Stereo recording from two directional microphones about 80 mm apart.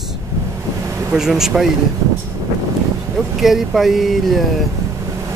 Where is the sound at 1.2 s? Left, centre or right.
Centre.